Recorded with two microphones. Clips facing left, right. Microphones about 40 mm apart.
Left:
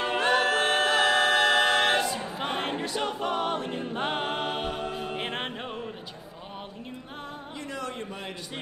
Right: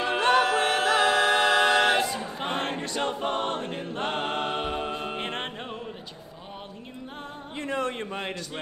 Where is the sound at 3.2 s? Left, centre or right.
Right.